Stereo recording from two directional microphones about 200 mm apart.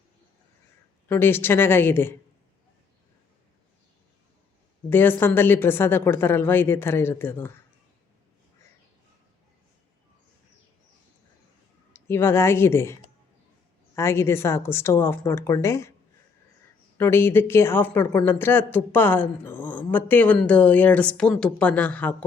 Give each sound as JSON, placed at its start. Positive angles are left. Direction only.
{"t": 1.0, "sound": "speech", "side_deg": 10}
{"t": 4.9, "sound": "speech", "side_deg": 10}
{"t": 11.9, "sound": "speech", "side_deg": 10}
{"t": 17.0, "sound": "speech", "side_deg": 10}